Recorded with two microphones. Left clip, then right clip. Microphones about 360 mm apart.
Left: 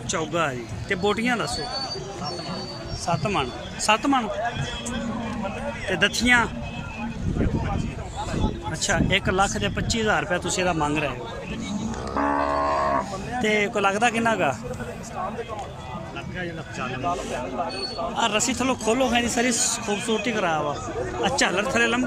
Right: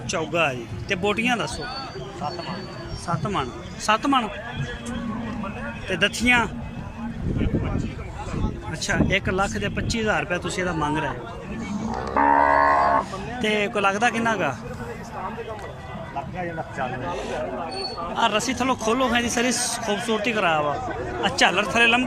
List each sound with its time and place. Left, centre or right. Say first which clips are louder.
0.1 s speech: right 2 dB; centre
3.1 s speech: left 2 dB; centre
5.9 s speech: even; centre
8.8 s speech: even; centre
12.1 s music: right 6 dB; right
13.4 s speech: even; centre
18.1 s speech: right 2 dB; centre